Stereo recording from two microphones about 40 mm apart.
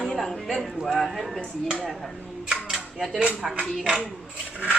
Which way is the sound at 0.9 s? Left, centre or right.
Centre.